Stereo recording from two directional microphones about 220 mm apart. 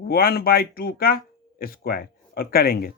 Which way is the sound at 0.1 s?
45° left (ahead or behind).